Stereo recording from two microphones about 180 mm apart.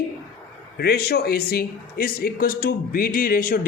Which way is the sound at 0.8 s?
60° left (ahead or behind).